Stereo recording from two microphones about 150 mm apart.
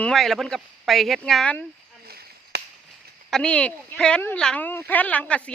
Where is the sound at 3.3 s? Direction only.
5° left (ahead or behind).